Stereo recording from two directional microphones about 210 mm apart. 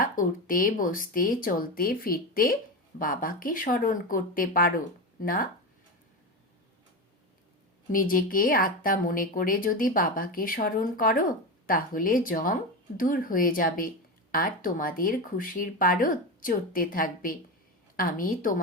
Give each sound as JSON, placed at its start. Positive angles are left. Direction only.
{"t": 0.0, "sound": "a woman's voice", "side_deg": 40}
{"t": 7.9, "sound": "a woman's voice", "side_deg": 40}